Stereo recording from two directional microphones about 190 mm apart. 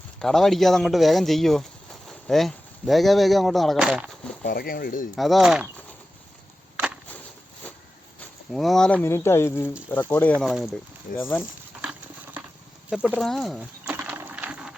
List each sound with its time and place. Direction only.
0.2 s speech: centre (ahead or behind)
4.4 s speech: 50° left (ahead or behind)
5.1 s speech: centre (ahead or behind)
6.7 s a sound: 5° right (ahead or behind)
8.5 s speech: centre (ahead or behind)
11.2 s speech: 10° left (ahead or behind)
13.1 s a sound: centre (ahead or behind)